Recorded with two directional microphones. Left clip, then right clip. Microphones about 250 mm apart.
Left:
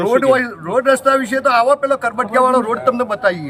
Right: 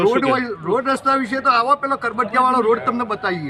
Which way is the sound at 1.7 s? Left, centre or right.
Left.